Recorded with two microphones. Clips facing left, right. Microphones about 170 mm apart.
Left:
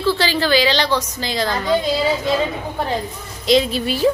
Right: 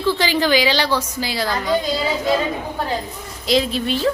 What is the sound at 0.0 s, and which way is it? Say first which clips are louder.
A woman's voice: even; 15° right (ahead or behind).